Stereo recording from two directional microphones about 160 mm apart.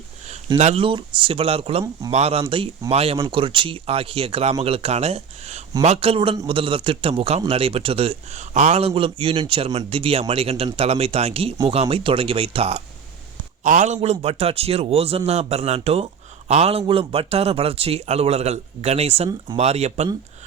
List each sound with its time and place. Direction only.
0.6 s a man's voice: 35° right (ahead or behind)
13.7 s a man's voice: 50° right (ahead or behind)